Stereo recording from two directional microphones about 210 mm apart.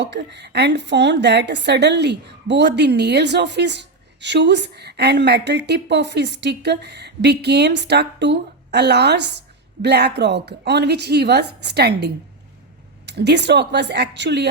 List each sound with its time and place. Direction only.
0.0 s a woman's voice: 55° right (ahead or behind)